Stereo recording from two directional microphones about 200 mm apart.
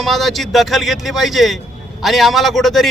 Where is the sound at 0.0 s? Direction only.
Centre (ahead or behind).